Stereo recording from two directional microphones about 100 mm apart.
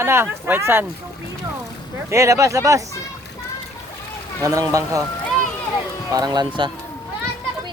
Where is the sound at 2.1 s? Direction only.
30° right (ahead or behind).